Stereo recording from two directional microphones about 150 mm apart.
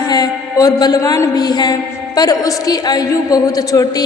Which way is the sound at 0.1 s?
25° left (ahead or behind).